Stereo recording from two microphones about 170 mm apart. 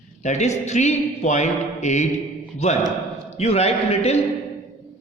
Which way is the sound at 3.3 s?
40° left (ahead or behind).